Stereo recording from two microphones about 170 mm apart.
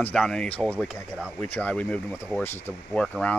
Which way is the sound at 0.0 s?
5° left (ahead or behind).